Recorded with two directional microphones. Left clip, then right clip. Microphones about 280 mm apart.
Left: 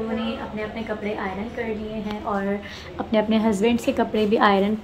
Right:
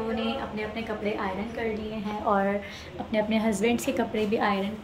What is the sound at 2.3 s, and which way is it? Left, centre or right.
Speech, right.